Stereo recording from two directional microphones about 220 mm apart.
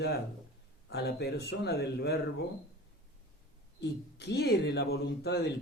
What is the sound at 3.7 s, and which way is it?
Speech, 50° left (ahead or behind).